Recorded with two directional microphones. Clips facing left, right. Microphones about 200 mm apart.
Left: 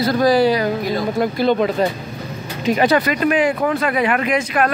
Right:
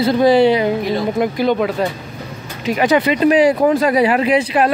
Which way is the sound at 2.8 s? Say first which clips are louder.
Right 4 dB; 20° right (ahead or behind).